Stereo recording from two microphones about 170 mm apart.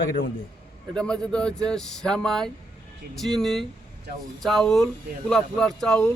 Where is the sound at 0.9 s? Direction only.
5° left (ahead or behind).